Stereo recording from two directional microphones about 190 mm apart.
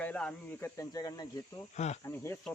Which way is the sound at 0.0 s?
10° left (ahead or behind).